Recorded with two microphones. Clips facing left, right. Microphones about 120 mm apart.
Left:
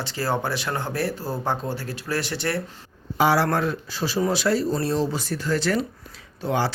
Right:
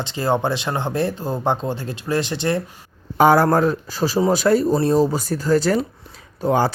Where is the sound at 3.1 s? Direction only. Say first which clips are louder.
Right 6 dB; 50° right (ahead or behind).